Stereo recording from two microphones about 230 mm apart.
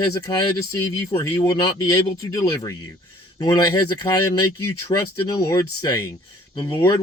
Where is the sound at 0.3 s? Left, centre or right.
Centre.